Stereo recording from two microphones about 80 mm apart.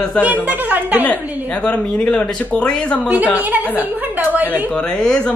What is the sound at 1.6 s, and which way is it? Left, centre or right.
A man's voice, centre.